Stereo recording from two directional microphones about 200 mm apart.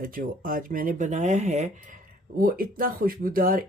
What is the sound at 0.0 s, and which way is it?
Speech, 45° right (ahead or behind).